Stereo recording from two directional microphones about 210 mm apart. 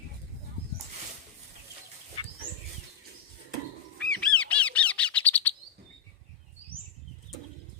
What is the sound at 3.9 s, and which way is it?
Bird, 5° left (ahead or behind).